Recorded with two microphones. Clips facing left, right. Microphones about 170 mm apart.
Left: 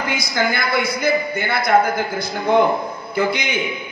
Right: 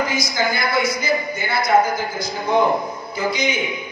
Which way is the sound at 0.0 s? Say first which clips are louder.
Even; 60° left (ahead or behind).